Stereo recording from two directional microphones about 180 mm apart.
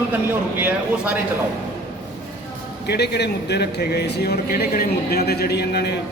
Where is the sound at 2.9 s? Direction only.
70° left (ahead or behind).